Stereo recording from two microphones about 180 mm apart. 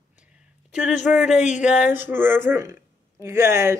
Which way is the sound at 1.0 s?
5° right (ahead or behind).